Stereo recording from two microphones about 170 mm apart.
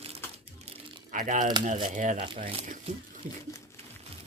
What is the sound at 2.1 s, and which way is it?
Speech, 30° right (ahead or behind).